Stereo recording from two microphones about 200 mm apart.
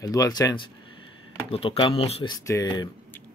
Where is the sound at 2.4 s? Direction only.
15° left (ahead or behind).